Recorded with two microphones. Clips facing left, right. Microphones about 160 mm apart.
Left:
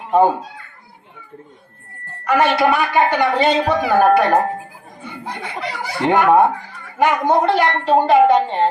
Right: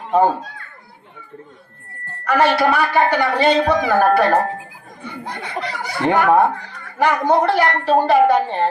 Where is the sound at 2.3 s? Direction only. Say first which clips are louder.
Even; 20° left (ahead or behind).